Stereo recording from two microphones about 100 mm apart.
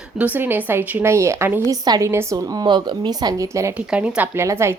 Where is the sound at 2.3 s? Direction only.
40° right (ahead or behind).